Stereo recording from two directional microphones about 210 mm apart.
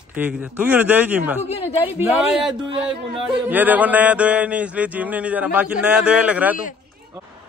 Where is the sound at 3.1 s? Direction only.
10° right (ahead or behind).